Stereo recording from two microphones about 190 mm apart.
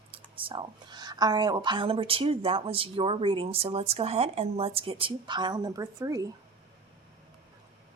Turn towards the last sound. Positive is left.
turn(degrees=-15)  # may be behind; listen again after turning